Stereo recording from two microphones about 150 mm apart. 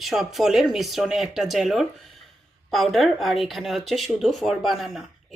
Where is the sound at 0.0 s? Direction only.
Centre (ahead or behind).